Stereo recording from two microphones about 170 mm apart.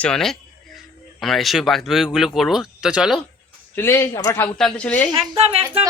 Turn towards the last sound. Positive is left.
turn(degrees=-35)  # may be behind; listen again after turning